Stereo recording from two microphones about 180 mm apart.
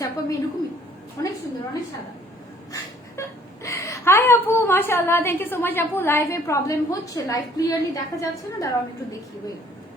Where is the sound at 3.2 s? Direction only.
15° left (ahead or behind).